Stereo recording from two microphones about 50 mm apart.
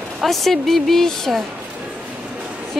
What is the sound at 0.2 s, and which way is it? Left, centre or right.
A woman's voice, centre.